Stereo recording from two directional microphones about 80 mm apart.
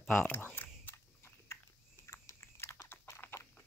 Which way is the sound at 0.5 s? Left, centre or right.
Left.